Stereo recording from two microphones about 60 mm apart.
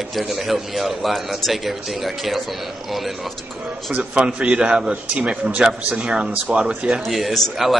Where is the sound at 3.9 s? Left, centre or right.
Right.